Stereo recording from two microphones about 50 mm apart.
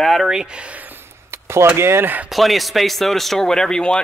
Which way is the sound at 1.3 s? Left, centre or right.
Right.